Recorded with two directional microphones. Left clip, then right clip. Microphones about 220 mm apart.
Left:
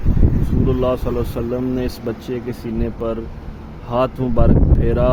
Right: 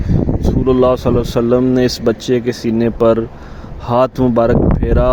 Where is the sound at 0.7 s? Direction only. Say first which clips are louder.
Right 8 dB; 35° right (ahead or behind).